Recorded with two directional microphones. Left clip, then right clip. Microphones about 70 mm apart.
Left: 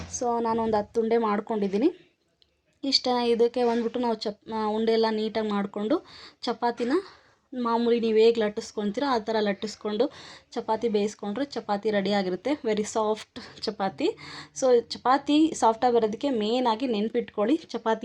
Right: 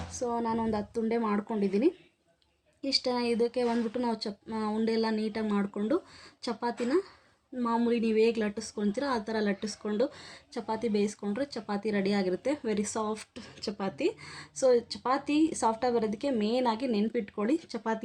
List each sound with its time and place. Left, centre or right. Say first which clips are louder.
0.2 s a woman's voice: left 5 dB; left
3.7 s a woman's voice: left 5 dB; left
13.3 s a woman's voice: left 5 dB; left